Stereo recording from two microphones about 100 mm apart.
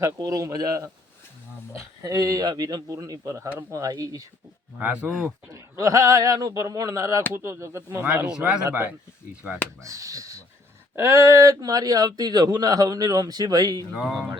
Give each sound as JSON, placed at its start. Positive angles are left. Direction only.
{"t": 0.0, "sound": "speech", "side_deg": -35}
{"t": 4.8, "sound": "speech", "side_deg": -15}
{"t": 5.5, "sound": "speech", "side_deg": -30}
{"t": 8.0, "sound": "speech", "side_deg": -15}
{"t": 9.8, "sound": "speech", "side_deg": -35}